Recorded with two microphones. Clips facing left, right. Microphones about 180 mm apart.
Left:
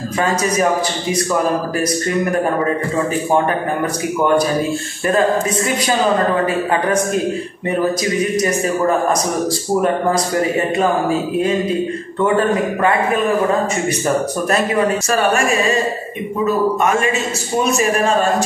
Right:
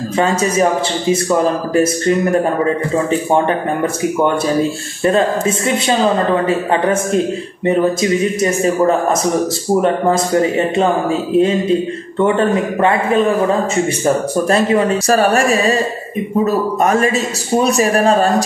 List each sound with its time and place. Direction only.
0.2 s a man's voice: 25° right (ahead or behind)
3.1 s a man's voice: 25° right (ahead or behind)
6.4 s a man's voice: 25° right (ahead or behind)
10.8 s a man's voice: 25° right (ahead or behind)
16.8 s speech: 35° right (ahead or behind)